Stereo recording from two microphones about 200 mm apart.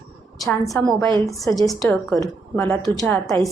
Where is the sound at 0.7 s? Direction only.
10° left (ahead or behind).